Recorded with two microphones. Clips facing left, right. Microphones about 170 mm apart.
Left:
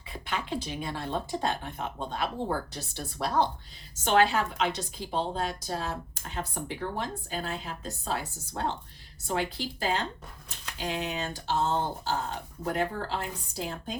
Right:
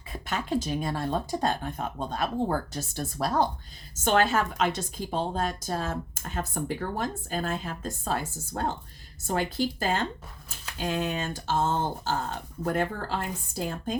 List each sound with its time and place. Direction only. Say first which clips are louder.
0.1 s speech: right 4 dB; 45° right (ahead or behind)